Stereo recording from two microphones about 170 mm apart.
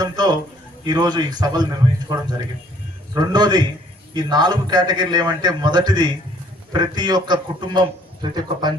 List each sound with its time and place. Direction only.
0.0 s a sound: 25° right (ahead or behind)
0.9 s a man's voice: 25° right (ahead or behind)
3.2 s a man's voice: 25° right (ahead or behind)